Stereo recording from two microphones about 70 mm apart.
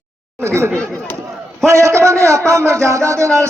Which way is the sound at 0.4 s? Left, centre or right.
Right.